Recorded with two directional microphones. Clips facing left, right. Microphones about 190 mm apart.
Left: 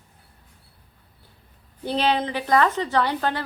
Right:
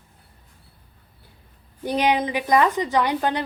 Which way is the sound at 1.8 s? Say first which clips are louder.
Right 2 dB; 15° right (ahead or behind).